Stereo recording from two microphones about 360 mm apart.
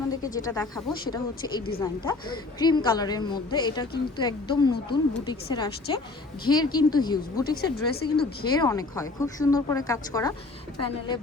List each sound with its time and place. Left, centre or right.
0.2 s a woman's voice: centre
7.5 s speech: left
8.6 s a woman's voice: centre